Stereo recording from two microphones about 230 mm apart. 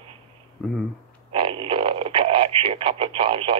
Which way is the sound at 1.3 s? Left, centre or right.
Right.